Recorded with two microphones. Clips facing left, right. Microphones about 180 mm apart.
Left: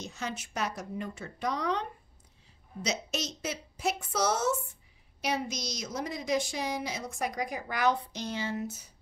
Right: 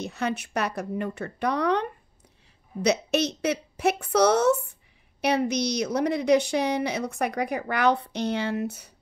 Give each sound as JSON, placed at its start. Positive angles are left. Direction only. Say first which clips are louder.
{"t": 0.0, "sound": "a woman's voice", "louder": "right 9 dB", "side_deg": -60}